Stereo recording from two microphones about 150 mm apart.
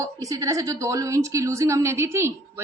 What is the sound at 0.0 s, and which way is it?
A woman's voice, 20° right (ahead or behind).